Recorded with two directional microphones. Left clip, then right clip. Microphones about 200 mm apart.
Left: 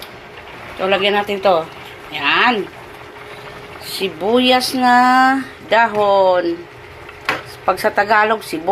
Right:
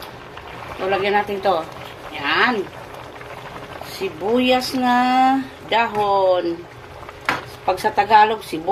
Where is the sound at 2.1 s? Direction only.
15° left (ahead or behind).